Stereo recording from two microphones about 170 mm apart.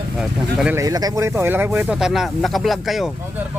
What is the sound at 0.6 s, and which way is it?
Speech, 15° right (ahead or behind).